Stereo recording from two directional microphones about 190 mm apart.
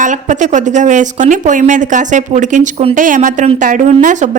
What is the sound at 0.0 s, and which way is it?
Speech, 40° right (ahead or behind).